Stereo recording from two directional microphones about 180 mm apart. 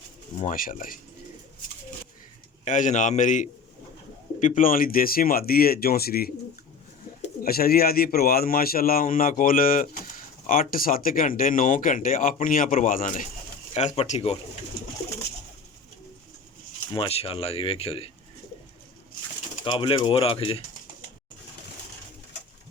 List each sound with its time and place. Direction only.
0.3 s speech: 45° left (ahead or behind)
2.6 s a man's voice: 45° left (ahead or behind)
7.4 s a man's voice: 55° left (ahead or behind)
13.7 s speech: 35° left (ahead or behind)
16.9 s speech: 30° left (ahead or behind)
19.6 s speech: 25° left (ahead or behind)